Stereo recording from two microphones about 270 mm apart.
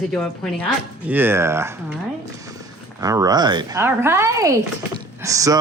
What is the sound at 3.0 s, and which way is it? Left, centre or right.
A woman's voice, centre.